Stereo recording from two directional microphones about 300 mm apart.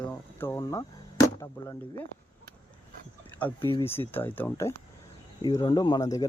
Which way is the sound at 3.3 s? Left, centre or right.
Centre.